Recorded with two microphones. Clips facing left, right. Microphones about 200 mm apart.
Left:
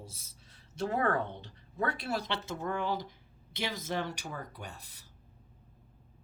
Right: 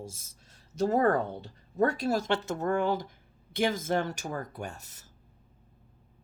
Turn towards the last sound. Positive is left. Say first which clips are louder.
# right 7 dB
turn(degrees=-45)  # may be behind; listen again after turning